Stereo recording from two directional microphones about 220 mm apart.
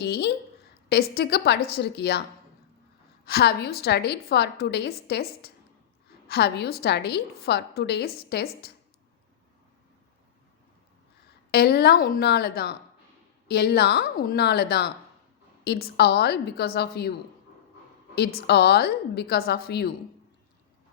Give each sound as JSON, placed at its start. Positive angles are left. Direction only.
{"t": 0.0, "sound": "a sound", "side_deg": 50}
{"t": 0.9, "sound": "a woman's voice", "side_deg": 45}
{"t": 3.2, "sound": "a woman's voice", "side_deg": 45}
{"t": 11.5, "sound": "a woman's voice", "side_deg": 45}